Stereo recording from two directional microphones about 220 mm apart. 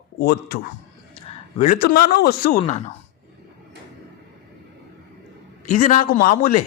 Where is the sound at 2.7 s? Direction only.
30° left (ahead or behind).